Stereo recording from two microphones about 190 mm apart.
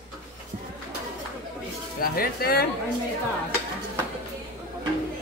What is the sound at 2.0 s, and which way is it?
Speech, 50° left (ahead or behind).